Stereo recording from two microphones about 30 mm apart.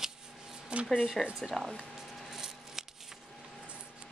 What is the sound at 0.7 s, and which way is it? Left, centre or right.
Speech, right.